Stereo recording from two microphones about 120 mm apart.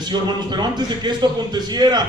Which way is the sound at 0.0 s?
35° right (ahead or behind).